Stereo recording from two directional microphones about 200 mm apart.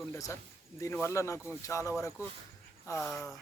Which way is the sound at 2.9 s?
Centre (ahead or behind).